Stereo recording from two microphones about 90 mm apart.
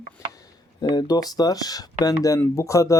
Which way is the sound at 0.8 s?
50° left (ahead or behind).